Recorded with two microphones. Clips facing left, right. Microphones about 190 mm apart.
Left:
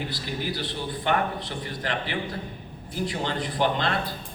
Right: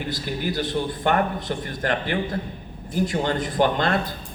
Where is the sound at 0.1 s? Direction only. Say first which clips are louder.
Right 4 dB; 45° right (ahead or behind).